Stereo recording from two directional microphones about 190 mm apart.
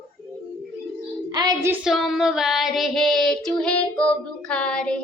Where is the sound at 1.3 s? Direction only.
20° right (ahead or behind).